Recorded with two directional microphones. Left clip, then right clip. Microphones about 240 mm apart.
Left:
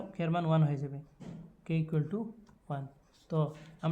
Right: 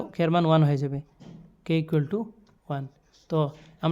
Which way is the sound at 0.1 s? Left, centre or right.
Right.